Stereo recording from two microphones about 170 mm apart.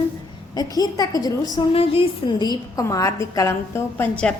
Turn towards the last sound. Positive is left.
turn(degrees=5)  # may be behind; listen again after turning